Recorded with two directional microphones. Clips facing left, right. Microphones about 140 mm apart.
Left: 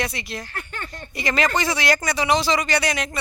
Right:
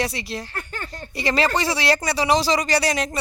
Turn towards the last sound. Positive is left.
turn(degrees=-35)  # may be behind; listen again after turning